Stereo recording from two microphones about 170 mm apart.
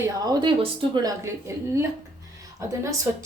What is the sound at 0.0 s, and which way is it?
Speech, 20° right (ahead or behind).